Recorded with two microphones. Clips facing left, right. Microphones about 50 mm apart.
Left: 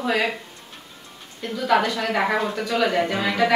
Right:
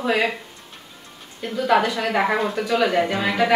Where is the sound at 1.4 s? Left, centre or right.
Centre.